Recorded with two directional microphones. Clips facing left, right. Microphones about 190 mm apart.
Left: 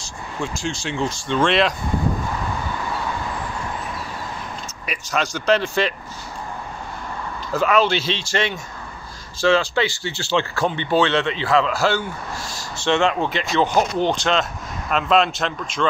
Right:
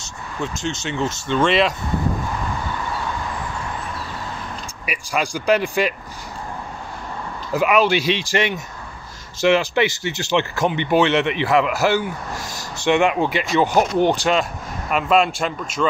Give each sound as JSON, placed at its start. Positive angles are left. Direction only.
{"t": 0.4, "sound": "speech", "side_deg": 0}
{"t": 4.8, "sound": "speech", "side_deg": -10}
{"t": 7.5, "sound": "speech", "side_deg": -10}